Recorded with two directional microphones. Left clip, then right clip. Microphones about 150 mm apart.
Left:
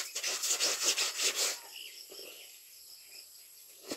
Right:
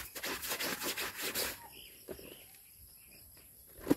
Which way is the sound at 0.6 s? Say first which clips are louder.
Left 9 dB; centre (ahead or behind).